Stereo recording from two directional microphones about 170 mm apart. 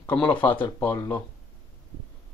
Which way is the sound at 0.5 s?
30° left (ahead or behind).